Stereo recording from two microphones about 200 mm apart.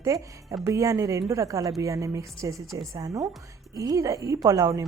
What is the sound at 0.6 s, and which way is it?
Speech, 15° right (ahead or behind).